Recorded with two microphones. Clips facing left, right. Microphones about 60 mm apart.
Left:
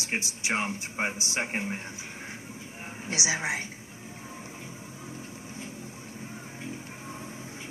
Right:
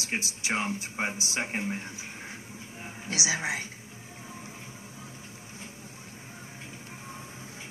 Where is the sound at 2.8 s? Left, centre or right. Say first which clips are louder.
Left 1 dB; left.